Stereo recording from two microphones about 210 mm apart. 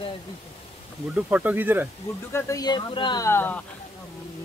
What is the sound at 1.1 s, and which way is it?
Speech, 5° right (ahead or behind).